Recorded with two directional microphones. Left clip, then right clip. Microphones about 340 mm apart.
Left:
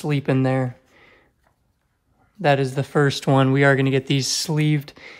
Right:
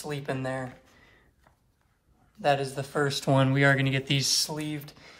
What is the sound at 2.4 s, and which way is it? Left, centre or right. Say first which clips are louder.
Speech: left 6 dB; left.